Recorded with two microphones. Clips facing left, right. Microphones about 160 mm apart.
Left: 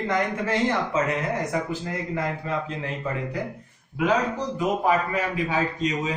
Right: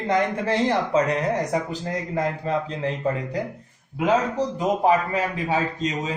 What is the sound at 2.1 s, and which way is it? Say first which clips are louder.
Speech: right 4 dB; 35° right (ahead or behind).